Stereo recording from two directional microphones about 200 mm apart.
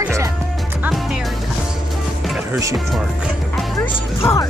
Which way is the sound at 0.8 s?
5° right (ahead or behind).